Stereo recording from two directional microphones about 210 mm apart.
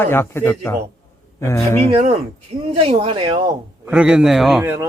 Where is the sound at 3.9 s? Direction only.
5° right (ahead or behind).